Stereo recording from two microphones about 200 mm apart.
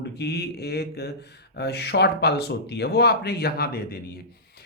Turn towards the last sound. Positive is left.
turn(degrees=50)  # may be behind; listen again after turning